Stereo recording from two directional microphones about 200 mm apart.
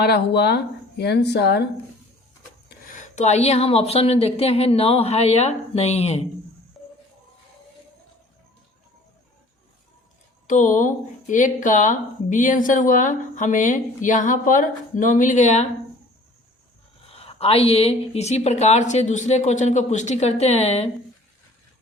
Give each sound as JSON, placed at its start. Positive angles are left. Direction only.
{"t": 0.0, "sound": "speech", "side_deg": 55}
{"t": 2.8, "sound": "a woman's voice", "side_deg": 40}
{"t": 6.8, "sound": "music", "side_deg": 0}
{"t": 10.4, "sound": "a woman's voice", "side_deg": 40}
{"t": 17.1, "sound": "a woman's voice", "side_deg": 30}